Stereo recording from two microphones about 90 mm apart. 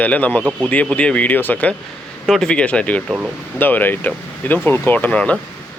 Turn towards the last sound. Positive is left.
turn(degrees=15)  # may be behind; listen again after turning